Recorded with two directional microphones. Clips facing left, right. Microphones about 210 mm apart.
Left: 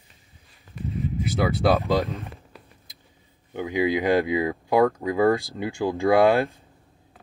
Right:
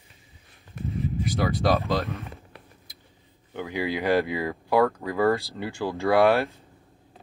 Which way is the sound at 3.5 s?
20° left (ahead or behind).